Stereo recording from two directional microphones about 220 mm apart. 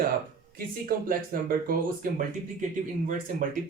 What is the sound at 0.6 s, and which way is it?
Speech, 40° right (ahead or behind).